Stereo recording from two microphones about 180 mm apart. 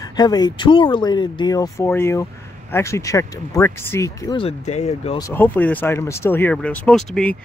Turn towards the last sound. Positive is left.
turn(degrees=5)  # may be behind; listen again after turning